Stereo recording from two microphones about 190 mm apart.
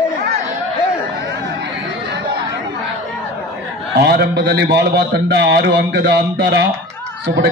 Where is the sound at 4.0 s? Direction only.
60° right (ahead or behind).